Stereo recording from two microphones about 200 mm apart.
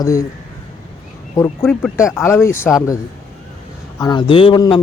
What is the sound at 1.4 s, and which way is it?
A man's voice, 15° left (ahead or behind).